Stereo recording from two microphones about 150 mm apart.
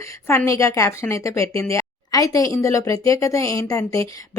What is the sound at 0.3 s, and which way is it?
Speech, 20° left (ahead or behind).